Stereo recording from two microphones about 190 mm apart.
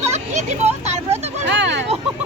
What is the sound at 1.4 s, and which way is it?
Speech, 65° right (ahead or behind).